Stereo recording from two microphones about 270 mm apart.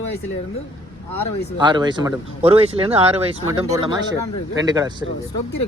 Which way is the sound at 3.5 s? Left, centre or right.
Centre.